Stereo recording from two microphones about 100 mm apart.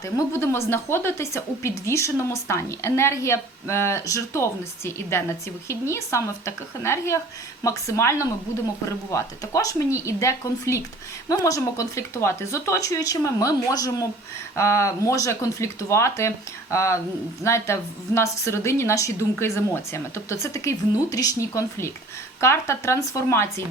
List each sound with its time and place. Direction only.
0.0 s a woman's voice: 30° left (ahead or behind)